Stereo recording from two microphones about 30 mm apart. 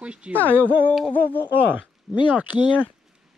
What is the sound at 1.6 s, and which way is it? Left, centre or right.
Speech, right.